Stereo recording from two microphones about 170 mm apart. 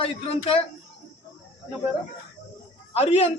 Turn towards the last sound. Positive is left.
turn(degrees=35)  # may be behind; listen again after turning